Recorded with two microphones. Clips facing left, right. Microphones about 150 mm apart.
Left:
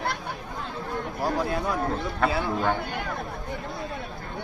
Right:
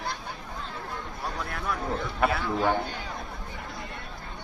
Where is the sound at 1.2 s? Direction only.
30° left (ahead or behind).